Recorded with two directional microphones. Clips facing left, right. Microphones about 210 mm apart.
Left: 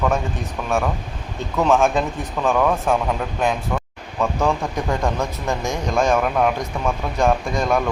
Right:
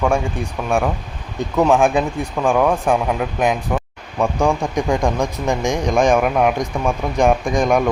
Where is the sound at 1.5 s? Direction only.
15° right (ahead or behind).